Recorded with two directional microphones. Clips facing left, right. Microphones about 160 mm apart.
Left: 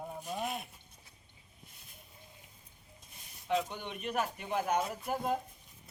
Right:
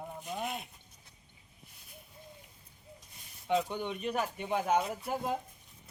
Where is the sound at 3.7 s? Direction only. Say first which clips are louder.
Right 5 dB; 30° right (ahead or behind).